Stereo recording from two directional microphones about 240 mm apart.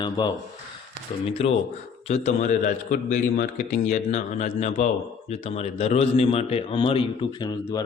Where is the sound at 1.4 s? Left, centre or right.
Left.